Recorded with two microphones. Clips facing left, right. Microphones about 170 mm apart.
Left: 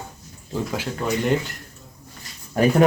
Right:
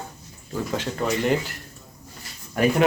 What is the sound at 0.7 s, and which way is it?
Speech, 5° left (ahead or behind).